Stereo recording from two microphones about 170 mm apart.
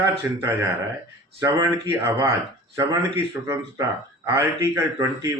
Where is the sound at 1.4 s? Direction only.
20° right (ahead or behind).